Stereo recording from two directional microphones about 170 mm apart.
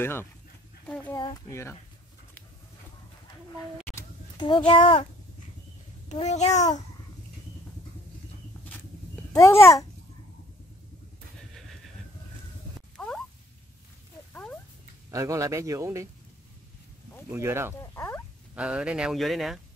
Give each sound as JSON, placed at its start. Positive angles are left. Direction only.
{"t": 0.0, "sound": "a child's voice", "side_deg": 15}
{"t": 0.8, "sound": "a sound", "side_deg": 10}
{"t": 1.1, "sound": "speech", "side_deg": 20}
{"t": 4.4, "sound": "a child's voice", "side_deg": 25}
{"t": 6.2, "sound": "a child's voice", "side_deg": 40}
{"t": 9.3, "sound": "a child's voice", "side_deg": 15}
{"t": 12.9, "sound": "a sound", "side_deg": 5}
{"t": 14.3, "sound": "a sound", "side_deg": 10}
{"t": 15.0, "sound": "speech", "side_deg": -20}
{"t": 17.3, "sound": "speech", "side_deg": -15}
{"t": 17.9, "sound": "a sound", "side_deg": 15}
{"t": 18.5, "sound": "speech", "side_deg": -5}